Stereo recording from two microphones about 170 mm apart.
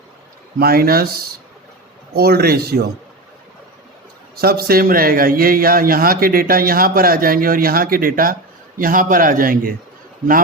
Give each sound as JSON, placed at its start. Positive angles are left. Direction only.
{"t": 0.6, "sound": "a man's voice", "side_deg": -60}
{"t": 2.1, "sound": "a man's voice", "side_deg": -65}
{"t": 4.4, "sound": "a man's voice", "side_deg": -65}